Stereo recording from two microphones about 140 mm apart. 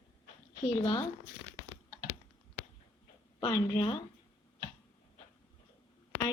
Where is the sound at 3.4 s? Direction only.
30° left (ahead or behind).